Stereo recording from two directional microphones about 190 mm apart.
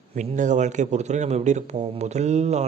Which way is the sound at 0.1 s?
35° right (ahead or behind).